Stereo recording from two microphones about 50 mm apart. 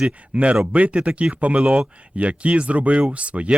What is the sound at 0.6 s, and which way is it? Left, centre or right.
Speech, right.